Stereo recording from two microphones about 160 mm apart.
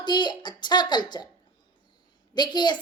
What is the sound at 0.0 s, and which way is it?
A woman's voice, 30° left (ahead or behind).